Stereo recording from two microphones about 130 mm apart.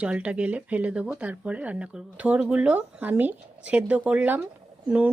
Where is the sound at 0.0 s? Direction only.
10° right (ahead or behind).